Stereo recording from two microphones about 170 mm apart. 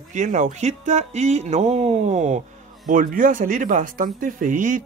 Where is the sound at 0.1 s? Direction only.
45° right (ahead or behind).